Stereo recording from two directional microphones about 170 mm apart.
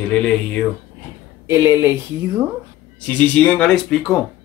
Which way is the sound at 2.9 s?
10° left (ahead or behind).